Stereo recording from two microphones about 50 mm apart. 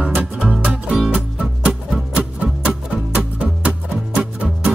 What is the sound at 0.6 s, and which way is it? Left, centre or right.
Music, right.